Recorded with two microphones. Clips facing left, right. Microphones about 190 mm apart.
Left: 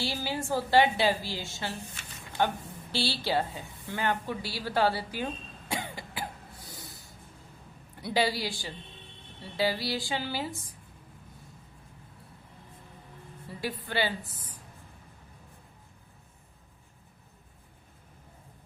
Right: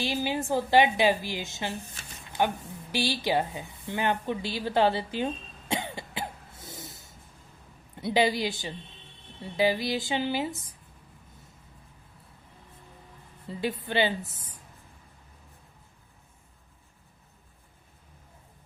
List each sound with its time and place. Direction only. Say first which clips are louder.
0.0 s a woman's voice: right 4 dB; 20° right (ahead or behind)
13.5 s a woman's voice: right 4 dB; 20° right (ahead or behind)